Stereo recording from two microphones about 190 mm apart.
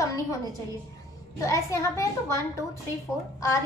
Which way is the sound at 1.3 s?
15° left (ahead or behind).